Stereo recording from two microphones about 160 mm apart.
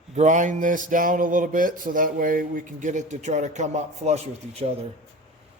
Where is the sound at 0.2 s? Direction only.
50° right (ahead or behind).